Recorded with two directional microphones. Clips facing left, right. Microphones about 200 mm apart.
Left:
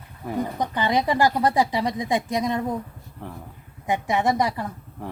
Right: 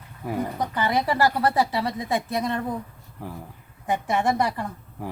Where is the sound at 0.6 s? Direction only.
15° left (ahead or behind).